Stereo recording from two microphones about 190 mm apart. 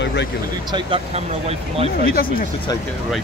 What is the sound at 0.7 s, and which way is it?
Speech, 30° right (ahead or behind).